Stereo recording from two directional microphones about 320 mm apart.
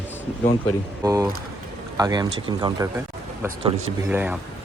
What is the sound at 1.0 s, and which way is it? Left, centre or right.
Speech, centre.